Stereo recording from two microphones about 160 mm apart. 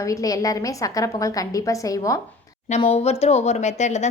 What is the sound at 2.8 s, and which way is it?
A woman's voice, 40° left (ahead or behind).